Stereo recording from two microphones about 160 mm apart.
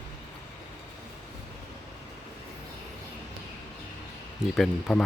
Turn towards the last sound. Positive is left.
turn(degrees=0)  # may be behind; listen again after turning